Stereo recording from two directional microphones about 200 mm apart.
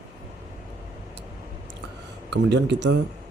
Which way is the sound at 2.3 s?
60° right (ahead or behind).